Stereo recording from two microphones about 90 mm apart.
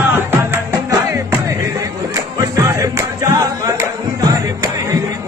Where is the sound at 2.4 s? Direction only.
35° right (ahead or behind).